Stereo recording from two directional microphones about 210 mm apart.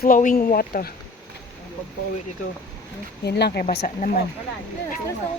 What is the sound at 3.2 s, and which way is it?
Speech, 55° left (ahead or behind).